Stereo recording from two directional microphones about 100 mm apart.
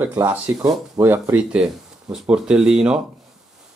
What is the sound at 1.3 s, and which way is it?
Speech, 10° right (ahead or behind).